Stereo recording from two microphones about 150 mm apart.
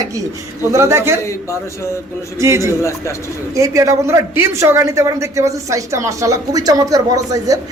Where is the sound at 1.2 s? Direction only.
20° left (ahead or behind).